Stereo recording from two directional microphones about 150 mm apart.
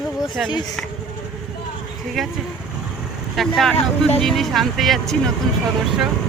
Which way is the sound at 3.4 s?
Centre (ahead or behind).